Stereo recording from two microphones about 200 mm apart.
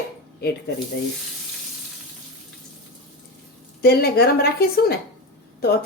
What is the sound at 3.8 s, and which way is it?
Speech, 50° left (ahead or behind).